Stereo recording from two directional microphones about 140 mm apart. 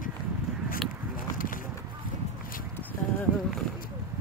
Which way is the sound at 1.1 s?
80° left.